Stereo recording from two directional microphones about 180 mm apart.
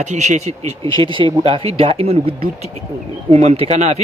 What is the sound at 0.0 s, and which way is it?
Speech, 40° right (ahead or behind).